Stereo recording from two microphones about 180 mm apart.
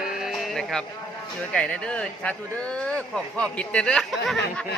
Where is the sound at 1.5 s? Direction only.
5° left (ahead or behind).